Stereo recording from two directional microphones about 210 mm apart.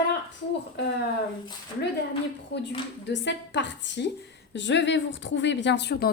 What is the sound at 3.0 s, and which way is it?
A woman's voice, 55° left (ahead or behind).